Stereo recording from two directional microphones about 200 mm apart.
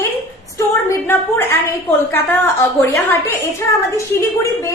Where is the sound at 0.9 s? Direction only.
10° left (ahead or behind).